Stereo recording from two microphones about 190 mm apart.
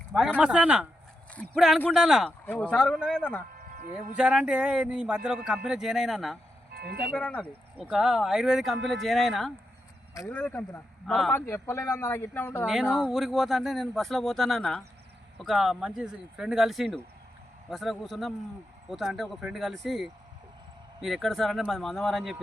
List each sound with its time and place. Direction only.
0.3 s speech: 5° right (ahead or behind)
3.8 s speech: 50° right (ahead or behind)
4.2 s speech: 5° right (ahead or behind)
6.7 s speech: 60° right (ahead or behind)
7.2 s speech: 5° left (ahead or behind)
13.1 s speech: centre (ahead or behind)